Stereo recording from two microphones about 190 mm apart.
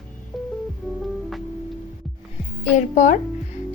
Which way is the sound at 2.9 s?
40° left (ahead or behind).